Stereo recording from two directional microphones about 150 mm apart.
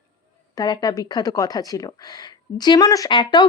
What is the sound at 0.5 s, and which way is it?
Speech, 25° left (ahead or behind).